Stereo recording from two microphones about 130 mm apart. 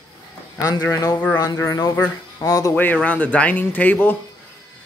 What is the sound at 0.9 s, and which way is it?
Speech, 30° left (ahead or behind).